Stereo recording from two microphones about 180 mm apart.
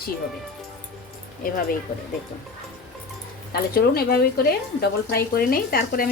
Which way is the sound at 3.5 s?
55° left (ahead or behind).